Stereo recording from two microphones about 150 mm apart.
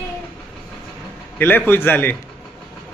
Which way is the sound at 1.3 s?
10° left (ahead or behind).